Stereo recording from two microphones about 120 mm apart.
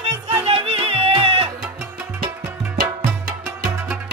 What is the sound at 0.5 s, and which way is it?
Music, 50° right (ahead or behind).